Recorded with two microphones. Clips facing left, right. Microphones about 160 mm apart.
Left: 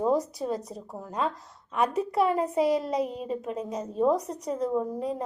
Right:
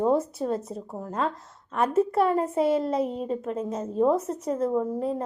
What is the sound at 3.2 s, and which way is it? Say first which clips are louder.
Speech: right 3 dB; 10° left (ahead or behind).